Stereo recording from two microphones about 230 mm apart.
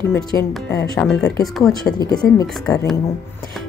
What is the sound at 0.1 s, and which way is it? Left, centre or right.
A woman's voice, centre.